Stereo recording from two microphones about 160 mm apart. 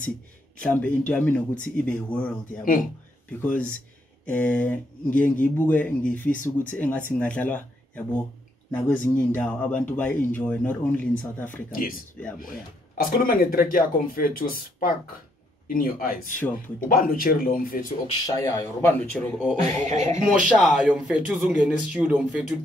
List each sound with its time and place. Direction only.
0.6 s speech: 10° left (ahead or behind)
2.6 s speech: 60° left (ahead or behind)
3.3 s speech: 10° left (ahead or behind)
6.3 s speech: 55° left (ahead or behind)
6.7 s speech: 10° left (ahead or behind)
11.7 s speech: 60° left (ahead or behind)
16.3 s speech: 10° left (ahead or behind)
16.9 s speech: 65° left (ahead or behind)
18.2 s speech: 20° left (ahead or behind)
20.3 s speech: 5° right (ahead or behind)